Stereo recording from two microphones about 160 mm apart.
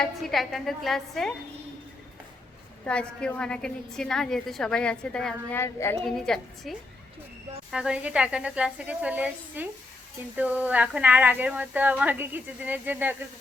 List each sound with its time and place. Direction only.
0.0 s a woman's voice: centre (ahead or behind)
2.8 s a woman's voice: 5° left (ahead or behind)
6.0 s a woman's voice: centre (ahead or behind)